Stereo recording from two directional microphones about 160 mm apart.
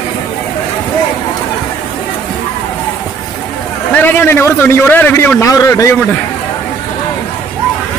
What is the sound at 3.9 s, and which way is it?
A man's voice, 15° left (ahead or behind).